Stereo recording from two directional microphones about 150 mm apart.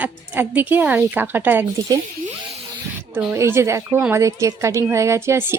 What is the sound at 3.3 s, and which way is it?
Speech, 20° right (ahead or behind).